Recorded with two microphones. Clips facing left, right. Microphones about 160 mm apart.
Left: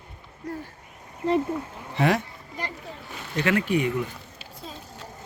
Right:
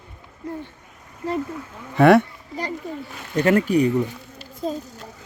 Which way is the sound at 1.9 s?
60° right (ahead or behind).